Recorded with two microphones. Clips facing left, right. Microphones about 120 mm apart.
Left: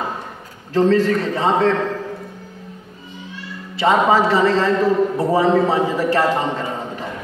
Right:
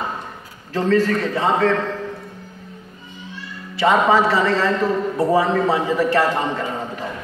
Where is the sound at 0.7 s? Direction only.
25° left (ahead or behind).